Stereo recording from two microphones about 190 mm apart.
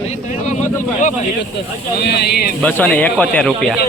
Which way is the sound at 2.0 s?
60° left (ahead or behind).